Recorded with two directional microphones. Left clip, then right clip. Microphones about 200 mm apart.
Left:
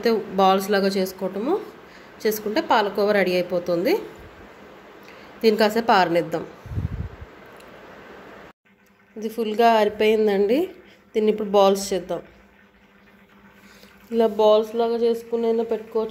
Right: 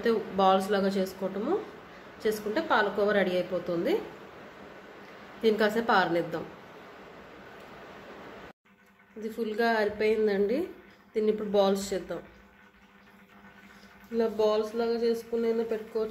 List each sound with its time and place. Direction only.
0.0 s a woman's voice: 35° left (ahead or behind)
2.2 s a woman's voice: 40° left (ahead or behind)
5.4 s a woman's voice: 35° left (ahead or behind)
9.2 s a woman's voice: 30° left (ahead or behind)
14.1 s speech: 35° left (ahead or behind)